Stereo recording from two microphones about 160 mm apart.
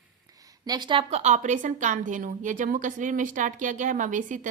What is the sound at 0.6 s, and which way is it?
A woman's voice, 25° right (ahead or behind).